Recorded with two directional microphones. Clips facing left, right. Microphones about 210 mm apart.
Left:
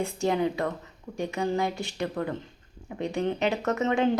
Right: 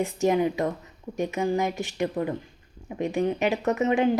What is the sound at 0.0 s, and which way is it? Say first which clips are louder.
Speech: right 3 dB; 15° right (ahead or behind).